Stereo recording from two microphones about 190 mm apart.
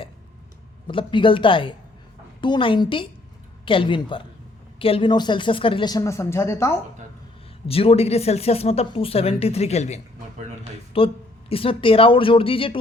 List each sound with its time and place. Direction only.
0.9 s speech: 25° left (ahead or behind)
7.7 s speech: 30° left (ahead or behind)